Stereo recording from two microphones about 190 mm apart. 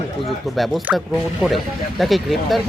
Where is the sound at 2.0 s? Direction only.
Centre (ahead or behind).